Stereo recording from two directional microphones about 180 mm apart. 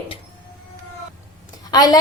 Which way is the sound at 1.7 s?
20° left (ahead or behind).